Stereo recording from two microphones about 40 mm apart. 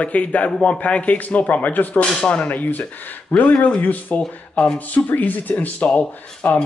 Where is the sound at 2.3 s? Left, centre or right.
Left.